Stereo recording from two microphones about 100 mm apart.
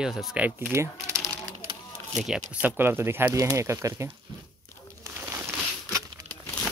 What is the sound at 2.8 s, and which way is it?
Speech, 20° right (ahead or behind).